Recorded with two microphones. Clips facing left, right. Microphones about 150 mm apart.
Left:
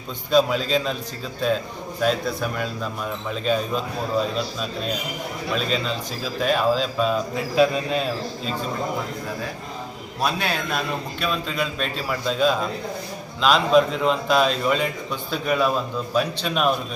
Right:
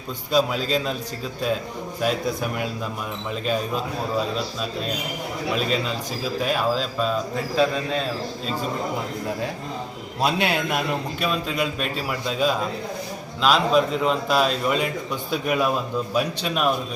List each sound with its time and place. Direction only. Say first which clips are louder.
0.3 s speech: left 2 dB; 5° right (ahead or behind)
2.0 s a man's voice: left 1 dB; 10° right (ahead or behind)
5.5 s speech: left 1 dB; 5° right (ahead or behind); by 8.0 s 10° left (ahead or behind)
10.2 s a man's voice: right 2 dB; 20° right (ahead or behind)
11.2 s a man's voice: even; 5° right (ahead or behind)